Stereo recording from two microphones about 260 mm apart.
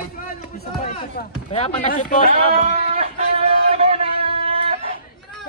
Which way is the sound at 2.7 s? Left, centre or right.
Right.